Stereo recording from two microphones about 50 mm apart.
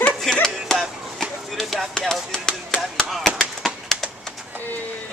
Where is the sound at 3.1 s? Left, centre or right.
Centre.